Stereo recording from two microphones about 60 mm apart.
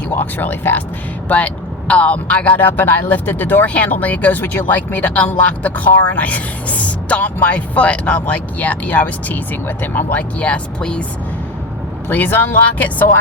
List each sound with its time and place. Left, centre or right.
0.1 s speech: left
1.3 s speech: left
12.0 s speech: left